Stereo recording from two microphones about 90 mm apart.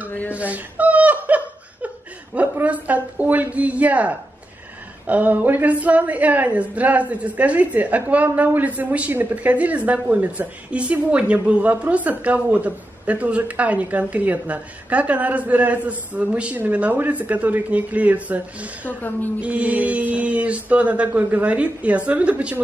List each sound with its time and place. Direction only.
0.3 s laughter: 15° right (ahead or behind)
2.3 s a woman's voice: 20° right (ahead or behind)
18.9 s a woman's voice: 20° left (ahead or behind)
19.4 s a woman's voice: 15° right (ahead or behind)